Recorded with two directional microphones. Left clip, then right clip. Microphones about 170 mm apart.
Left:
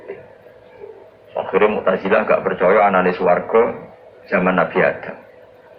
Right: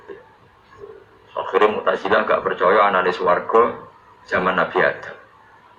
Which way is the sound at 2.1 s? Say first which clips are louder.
Left 2 dB; 35° right (ahead or behind).